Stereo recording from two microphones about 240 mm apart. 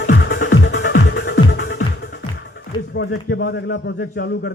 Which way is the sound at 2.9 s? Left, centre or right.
Left.